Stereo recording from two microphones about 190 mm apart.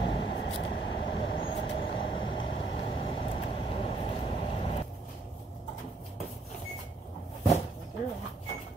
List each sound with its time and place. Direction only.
0.0 s vehicle: 30° left (ahead or behind)